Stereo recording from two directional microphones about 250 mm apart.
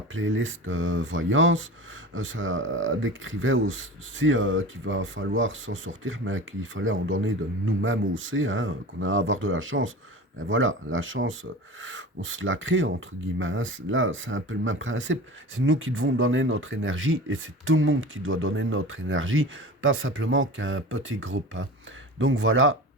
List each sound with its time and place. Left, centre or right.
0.1 s speech: right